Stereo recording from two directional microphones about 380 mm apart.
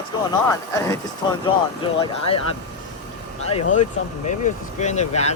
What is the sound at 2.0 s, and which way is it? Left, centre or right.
Speech, centre.